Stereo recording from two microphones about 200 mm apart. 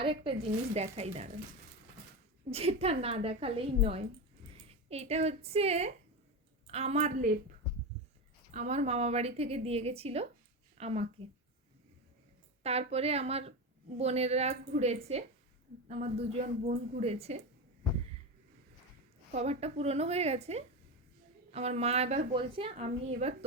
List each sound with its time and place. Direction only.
0.0 s a woman's voice: 25° right (ahead or behind)
2.5 s a woman's voice: 30° right (ahead or behind)
8.5 s a woman's voice: 35° right (ahead or behind)
12.6 s a woman's voice: 30° right (ahead or behind)
19.3 s a woman's voice: 30° right (ahead or behind)